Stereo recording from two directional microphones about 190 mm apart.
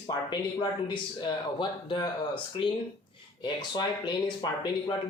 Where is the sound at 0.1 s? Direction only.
20° left (ahead or behind).